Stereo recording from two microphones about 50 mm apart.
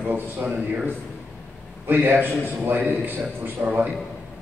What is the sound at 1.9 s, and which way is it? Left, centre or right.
A man's voice, right.